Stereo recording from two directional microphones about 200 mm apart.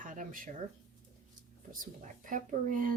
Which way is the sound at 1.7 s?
40° right (ahead or behind).